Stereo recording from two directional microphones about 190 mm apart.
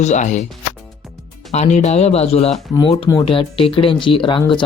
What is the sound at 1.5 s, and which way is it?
Speech, 35° left (ahead or behind).